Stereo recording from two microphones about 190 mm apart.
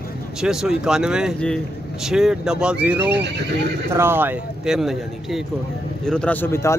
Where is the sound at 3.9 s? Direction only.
10° right (ahead or behind).